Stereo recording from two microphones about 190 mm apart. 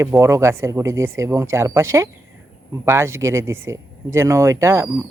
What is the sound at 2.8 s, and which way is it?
Speech, 15° right (ahead or behind).